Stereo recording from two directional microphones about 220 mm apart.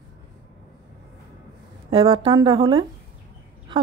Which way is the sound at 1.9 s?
25° right (ahead or behind).